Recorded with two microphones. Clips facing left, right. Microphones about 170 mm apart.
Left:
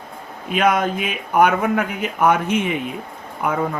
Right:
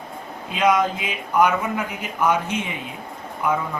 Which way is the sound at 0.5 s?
60° left (ahead or behind).